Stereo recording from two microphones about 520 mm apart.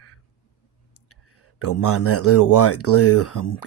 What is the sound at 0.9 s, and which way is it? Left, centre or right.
Speech, left.